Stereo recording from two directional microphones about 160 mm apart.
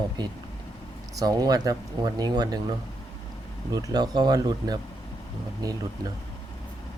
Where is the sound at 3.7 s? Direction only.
25° right (ahead or behind).